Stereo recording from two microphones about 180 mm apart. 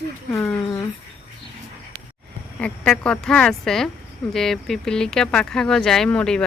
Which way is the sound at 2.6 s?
5° left (ahead or behind).